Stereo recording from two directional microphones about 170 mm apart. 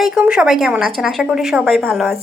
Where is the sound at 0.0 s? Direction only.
5° right (ahead or behind).